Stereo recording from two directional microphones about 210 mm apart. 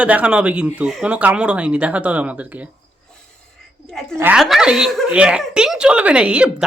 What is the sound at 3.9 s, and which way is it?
Speech, 5° left (ahead or behind).